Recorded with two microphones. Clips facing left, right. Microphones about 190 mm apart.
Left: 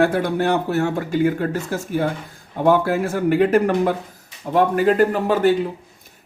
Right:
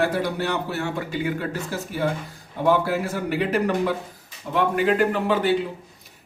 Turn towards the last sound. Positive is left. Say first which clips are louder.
# left 4 dB
turn(degrees=45)  # may be behind; listen again after turning